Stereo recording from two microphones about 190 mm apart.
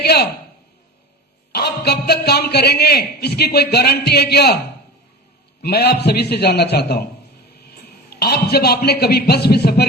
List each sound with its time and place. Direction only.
0.0 s a sound: 55° left (ahead or behind)
1.5 s a man's voice: 60° left (ahead or behind)
5.6 s a man's voice: 55° left (ahead or behind)
8.1 s a man's voice: 55° left (ahead or behind)